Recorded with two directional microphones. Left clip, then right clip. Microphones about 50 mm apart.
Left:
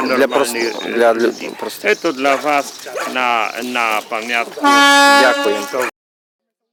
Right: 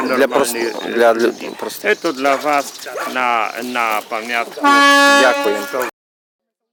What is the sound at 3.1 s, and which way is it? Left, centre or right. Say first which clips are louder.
Speech: even; centre.